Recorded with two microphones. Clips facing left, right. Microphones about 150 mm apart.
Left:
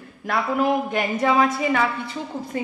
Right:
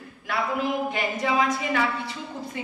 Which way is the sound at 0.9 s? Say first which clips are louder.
Left 5 dB; 50° left (ahead or behind).